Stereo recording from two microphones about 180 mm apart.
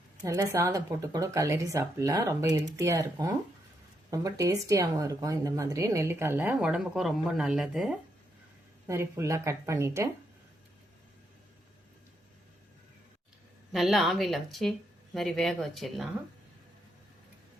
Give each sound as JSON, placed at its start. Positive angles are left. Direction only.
{"t": 0.3, "sound": "speech", "side_deg": -15}
{"t": 8.9, "sound": "speech", "side_deg": -15}
{"t": 13.7, "sound": "a woman's voice", "side_deg": 0}